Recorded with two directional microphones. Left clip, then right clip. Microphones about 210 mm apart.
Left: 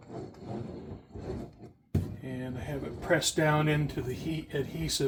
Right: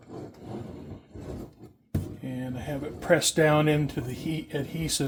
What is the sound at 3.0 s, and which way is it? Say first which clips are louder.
Speech: right 5 dB; 55° right (ahead or behind).